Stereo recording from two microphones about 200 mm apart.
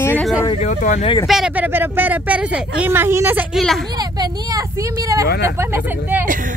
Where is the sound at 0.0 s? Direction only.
10° left (ahead or behind).